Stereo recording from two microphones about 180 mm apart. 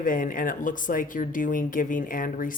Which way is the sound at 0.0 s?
50° left (ahead or behind).